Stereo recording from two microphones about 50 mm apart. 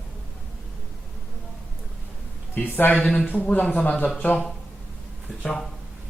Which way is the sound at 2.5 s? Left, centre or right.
Left.